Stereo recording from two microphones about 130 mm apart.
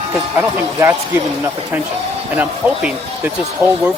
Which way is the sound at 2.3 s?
10° right (ahead or behind).